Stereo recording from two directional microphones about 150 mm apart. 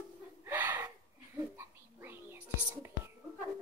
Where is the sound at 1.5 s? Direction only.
15° right (ahead or behind).